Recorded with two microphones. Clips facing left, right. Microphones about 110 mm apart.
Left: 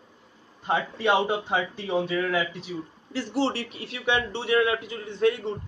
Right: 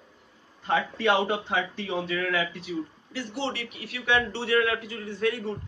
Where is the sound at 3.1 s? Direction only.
35° left (ahead or behind).